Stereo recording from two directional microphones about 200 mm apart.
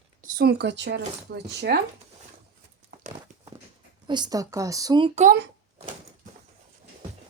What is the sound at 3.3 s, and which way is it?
Walk, 40° right (ahead or behind).